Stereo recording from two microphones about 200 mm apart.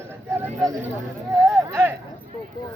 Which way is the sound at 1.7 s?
15° right (ahead or behind).